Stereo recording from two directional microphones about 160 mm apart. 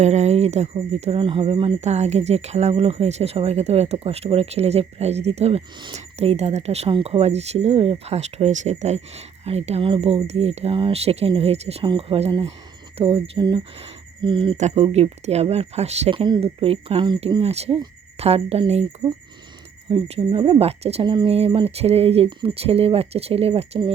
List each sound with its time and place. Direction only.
0.0 s speech: 45° right (ahead or behind)
19.9 s speech: 35° right (ahead or behind)